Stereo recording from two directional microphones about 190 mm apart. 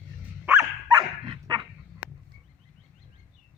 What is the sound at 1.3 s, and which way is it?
Dog, 25° right (ahead or behind).